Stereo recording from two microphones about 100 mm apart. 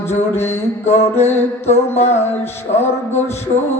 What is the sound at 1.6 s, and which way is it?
Mantra, 90° left.